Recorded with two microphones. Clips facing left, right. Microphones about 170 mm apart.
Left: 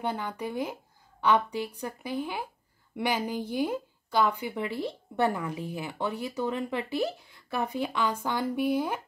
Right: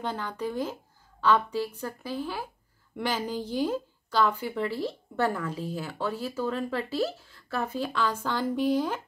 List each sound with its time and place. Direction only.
0.0 s a woman's voice: 10° left (ahead or behind)